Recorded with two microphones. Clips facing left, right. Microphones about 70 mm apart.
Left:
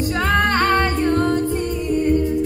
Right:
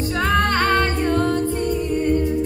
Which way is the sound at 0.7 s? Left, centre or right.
Centre.